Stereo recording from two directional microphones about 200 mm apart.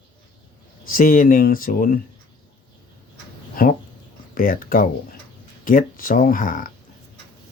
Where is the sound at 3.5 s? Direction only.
45° left (ahead or behind).